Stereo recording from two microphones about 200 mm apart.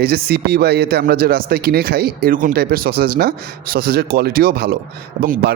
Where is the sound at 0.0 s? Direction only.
50° right (ahead or behind).